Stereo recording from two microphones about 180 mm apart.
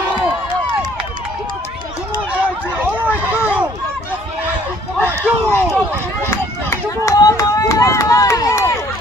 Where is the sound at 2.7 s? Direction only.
10° right (ahead or behind).